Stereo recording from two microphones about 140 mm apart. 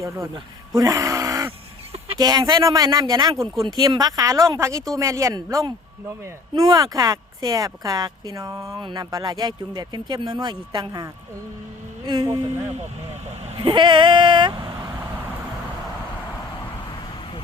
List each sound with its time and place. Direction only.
0.7 s speech: 25° right (ahead or behind)
13.6 s speech: 35° right (ahead or behind)